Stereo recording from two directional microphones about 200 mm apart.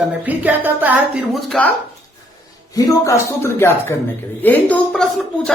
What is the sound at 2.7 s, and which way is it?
Speech, 15° left (ahead or behind).